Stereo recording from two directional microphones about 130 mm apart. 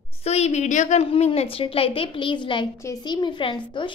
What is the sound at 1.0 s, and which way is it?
A child's voice, 50° left (ahead or behind).